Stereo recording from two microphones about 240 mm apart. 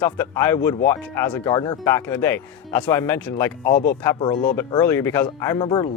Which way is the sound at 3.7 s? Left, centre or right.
Left.